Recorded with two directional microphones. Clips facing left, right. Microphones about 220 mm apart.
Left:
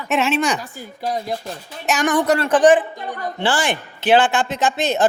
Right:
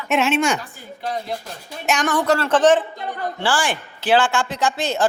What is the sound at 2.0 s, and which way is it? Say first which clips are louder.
A man's voice: left 3 dB; 15° left (ahead or behind).